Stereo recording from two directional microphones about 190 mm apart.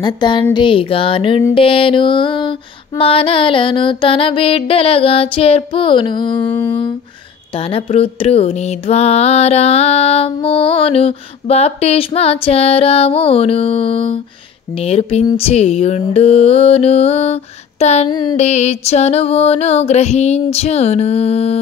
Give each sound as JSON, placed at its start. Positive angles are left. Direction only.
{"t": 0.0, "sound": "mantra", "side_deg": 25}